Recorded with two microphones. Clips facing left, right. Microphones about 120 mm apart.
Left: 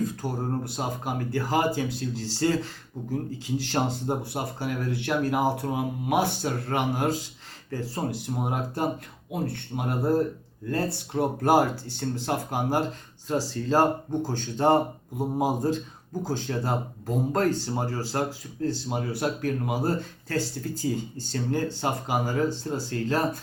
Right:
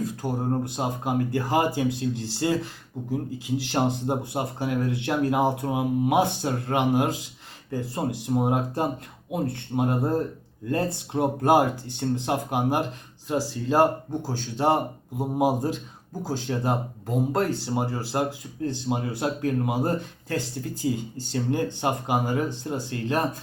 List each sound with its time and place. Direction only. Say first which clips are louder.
0.0 s speech: right 1 dB; 15° right (ahead or behind)
3.1 s speech: right 2 dB; 10° right (ahead or behind)